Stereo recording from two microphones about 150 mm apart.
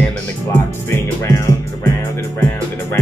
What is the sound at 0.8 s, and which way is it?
Music, 20° left (ahead or behind).